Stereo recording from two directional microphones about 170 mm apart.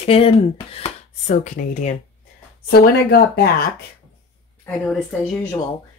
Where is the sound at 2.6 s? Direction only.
65° left (ahead or behind).